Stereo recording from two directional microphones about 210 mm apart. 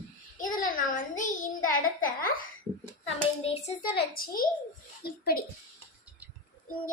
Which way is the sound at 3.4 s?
30° left (ahead or behind).